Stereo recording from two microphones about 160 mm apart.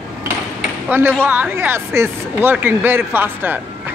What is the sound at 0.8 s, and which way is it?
Speech, 15° right (ahead or behind).